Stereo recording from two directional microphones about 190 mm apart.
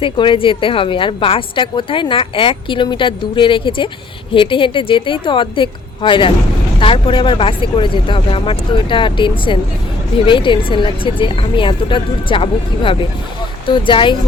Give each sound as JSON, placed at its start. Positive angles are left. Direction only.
{"t": 0.0, "sound": "a woman's voice", "side_deg": 25}